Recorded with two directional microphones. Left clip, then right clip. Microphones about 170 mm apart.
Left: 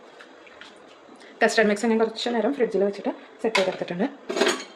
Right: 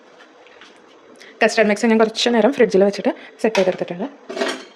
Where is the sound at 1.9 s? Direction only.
65° right (ahead or behind).